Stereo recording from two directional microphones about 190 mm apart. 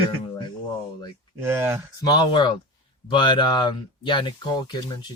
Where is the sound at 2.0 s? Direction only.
20° left (ahead or behind).